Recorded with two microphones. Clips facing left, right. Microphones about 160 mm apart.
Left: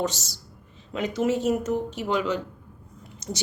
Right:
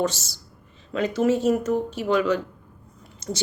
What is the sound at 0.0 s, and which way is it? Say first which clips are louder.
A woman's voice: right 3 dB; 15° left (ahead or behind).